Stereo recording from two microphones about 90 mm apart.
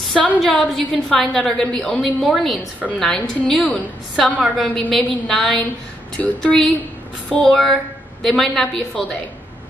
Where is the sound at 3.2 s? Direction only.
15° left (ahead or behind).